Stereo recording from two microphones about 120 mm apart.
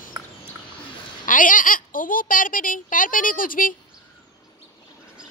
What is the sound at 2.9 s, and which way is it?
Speech, 90° left.